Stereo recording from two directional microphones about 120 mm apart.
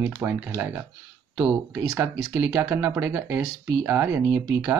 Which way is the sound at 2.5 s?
20° right (ahead or behind).